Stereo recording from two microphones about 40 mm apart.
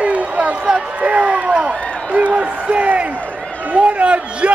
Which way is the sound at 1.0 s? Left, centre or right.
Right.